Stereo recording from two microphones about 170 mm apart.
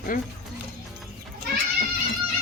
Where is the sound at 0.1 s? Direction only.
55° left (ahead or behind).